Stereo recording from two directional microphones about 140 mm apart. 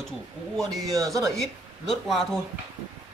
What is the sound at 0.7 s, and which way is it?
Speech, 25° right (ahead or behind).